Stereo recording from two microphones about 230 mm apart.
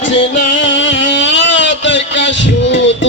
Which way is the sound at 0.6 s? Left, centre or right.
Left.